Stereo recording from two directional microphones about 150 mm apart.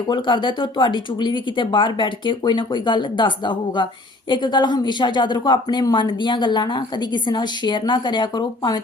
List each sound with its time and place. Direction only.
0.1 s speech: 30° left (ahead or behind)